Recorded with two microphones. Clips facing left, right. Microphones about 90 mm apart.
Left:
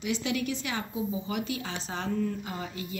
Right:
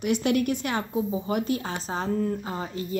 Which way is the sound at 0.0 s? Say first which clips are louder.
Right 7 dB; 55° right (ahead or behind).